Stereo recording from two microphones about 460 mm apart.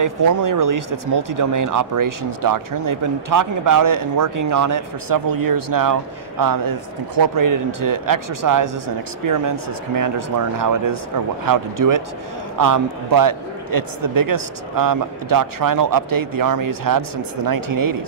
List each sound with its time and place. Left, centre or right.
0.0 s speech: right